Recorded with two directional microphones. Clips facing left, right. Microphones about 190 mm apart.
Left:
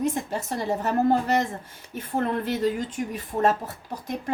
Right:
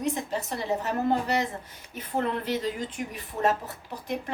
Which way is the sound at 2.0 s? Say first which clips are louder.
Left 3 dB; 50° left (ahead or behind).